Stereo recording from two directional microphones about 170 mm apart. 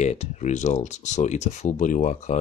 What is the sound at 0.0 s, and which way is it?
Speech, 40° left (ahead or behind).